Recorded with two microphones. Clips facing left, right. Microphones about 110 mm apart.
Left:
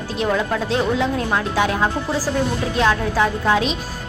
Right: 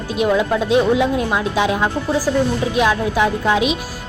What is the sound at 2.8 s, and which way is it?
Speech, 15° right (ahead or behind).